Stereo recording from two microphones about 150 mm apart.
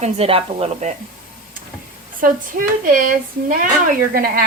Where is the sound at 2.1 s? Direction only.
65° right (ahead or behind).